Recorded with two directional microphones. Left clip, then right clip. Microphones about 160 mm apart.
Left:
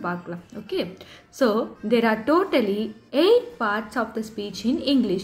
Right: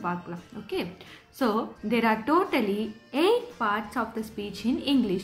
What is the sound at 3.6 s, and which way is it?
Speech, 30° right (ahead or behind).